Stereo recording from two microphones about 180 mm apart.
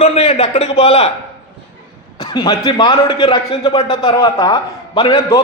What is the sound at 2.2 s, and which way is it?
A man's voice, 20° left (ahead or behind).